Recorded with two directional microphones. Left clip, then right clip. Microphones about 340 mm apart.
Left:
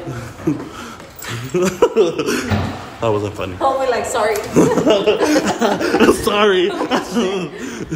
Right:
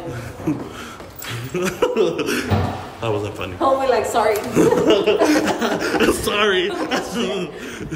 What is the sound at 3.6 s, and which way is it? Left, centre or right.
Speech, centre.